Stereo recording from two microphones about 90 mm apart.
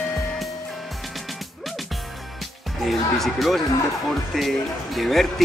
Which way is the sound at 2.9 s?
Centre (ahead or behind).